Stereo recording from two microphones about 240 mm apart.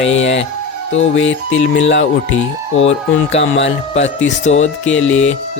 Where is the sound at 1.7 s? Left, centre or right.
Left.